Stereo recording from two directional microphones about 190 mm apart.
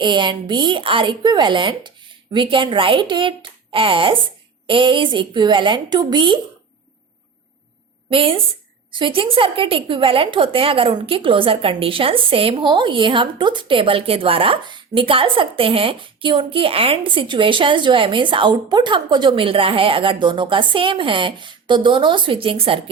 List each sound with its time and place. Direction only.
0.0 s a woman's voice: 25° right (ahead or behind)
8.1 s a woman's voice: 30° right (ahead or behind)